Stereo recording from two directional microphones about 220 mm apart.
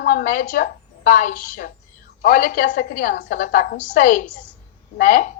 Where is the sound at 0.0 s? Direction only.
40° left (ahead or behind).